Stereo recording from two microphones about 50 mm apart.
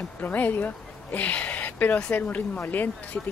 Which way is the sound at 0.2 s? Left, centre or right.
Left.